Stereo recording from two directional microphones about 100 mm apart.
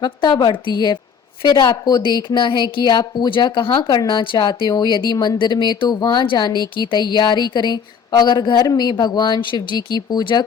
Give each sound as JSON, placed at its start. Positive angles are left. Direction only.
{"t": 0.0, "sound": "speech", "side_deg": 45}